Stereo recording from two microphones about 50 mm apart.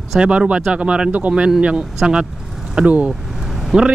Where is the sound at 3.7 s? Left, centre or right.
Centre.